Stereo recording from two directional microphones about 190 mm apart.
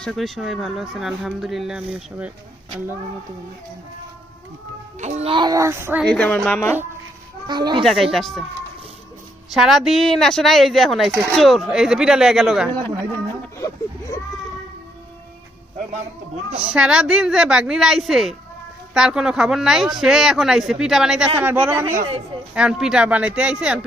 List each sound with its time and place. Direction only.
0.0 s speech: centre (ahead or behind)
5.0 s a child's voice: 35° right (ahead or behind); by 6.0 s 10° right (ahead or behind)
6.0 s a woman's voice: 10° left (ahead or behind)
7.4 s a child's voice: 20° right (ahead or behind)
7.8 s speech: centre (ahead or behind)
9.5 s speech: centre (ahead or behind)
16.5 s a man's voice: 5° right (ahead or behind)